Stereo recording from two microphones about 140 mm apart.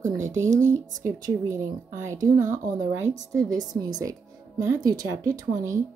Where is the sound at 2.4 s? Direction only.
65° right (ahead or behind).